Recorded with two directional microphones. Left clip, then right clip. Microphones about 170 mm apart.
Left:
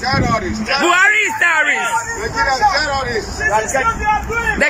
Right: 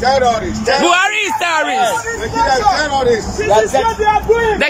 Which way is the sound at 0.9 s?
10° right (ahead or behind).